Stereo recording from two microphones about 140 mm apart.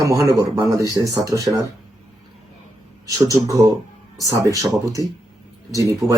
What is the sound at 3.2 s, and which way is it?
Speech, 25° right (ahead or behind).